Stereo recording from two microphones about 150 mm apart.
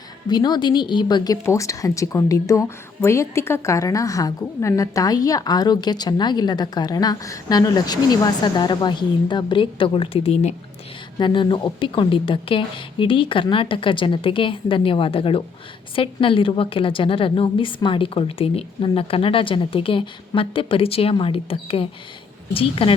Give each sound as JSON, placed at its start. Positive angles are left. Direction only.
{"t": 0.3, "sound": "speech", "side_deg": 30}
{"t": 11.2, "sound": "a woman's voice", "side_deg": 30}